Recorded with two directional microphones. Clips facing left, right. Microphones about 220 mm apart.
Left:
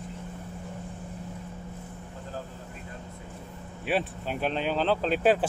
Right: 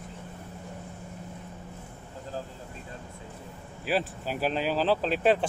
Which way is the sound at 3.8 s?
Centre (ahead or behind).